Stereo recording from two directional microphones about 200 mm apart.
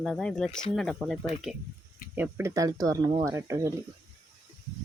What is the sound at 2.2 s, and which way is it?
Speech, 10° right (ahead or behind).